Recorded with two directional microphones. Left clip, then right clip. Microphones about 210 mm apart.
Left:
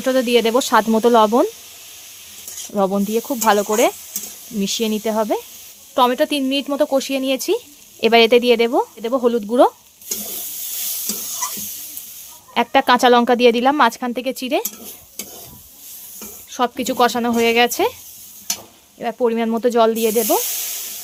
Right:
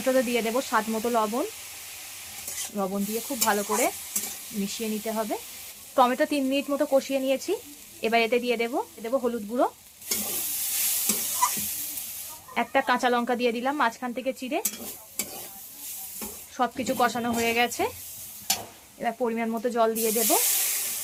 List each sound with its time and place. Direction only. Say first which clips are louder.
0.0 s speech: left 8 dB; 55° left (ahead or behind)
2.7 s speech: left 12 dB; 60° left (ahead or behind)
5.9 s speech: left 6 dB; 45° left (ahead or behind)
12.5 s speech: left 10 dB; 60° left (ahead or behind)
16.6 s speech: left 8 dB; 60° left (ahead or behind)
18.9 s speech: left 9 dB; 55° left (ahead or behind)